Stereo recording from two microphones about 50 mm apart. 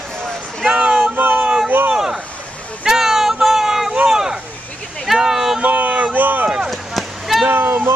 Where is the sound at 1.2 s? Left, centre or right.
Right.